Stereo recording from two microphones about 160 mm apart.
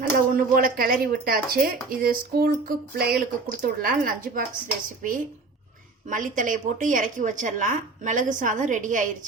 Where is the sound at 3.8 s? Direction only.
60° right (ahead or behind).